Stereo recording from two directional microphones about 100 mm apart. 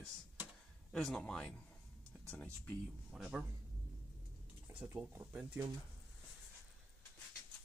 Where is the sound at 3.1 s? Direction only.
5° right (ahead or behind).